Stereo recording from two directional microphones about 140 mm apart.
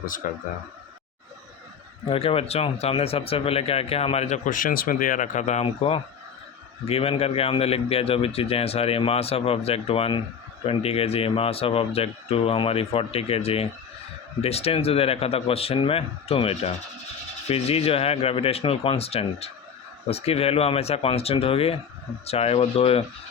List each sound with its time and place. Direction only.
0.2 s speech: 70° left (ahead or behind)
2.0 s a man's voice: 45° left (ahead or behind)
4.4 s a man's voice: 75° left (ahead or behind); by 23.0 s 45° left (ahead or behind)